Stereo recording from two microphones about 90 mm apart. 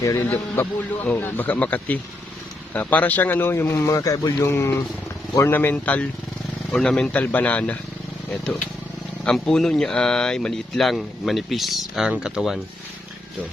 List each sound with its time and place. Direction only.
0.0 s speech: 35° left (ahead or behind)
0.3 s a man's voice: 20° left (ahead or behind)
9.2 s speech: 5° left (ahead or behind)